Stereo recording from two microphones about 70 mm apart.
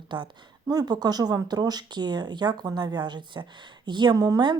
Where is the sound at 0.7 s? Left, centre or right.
Right.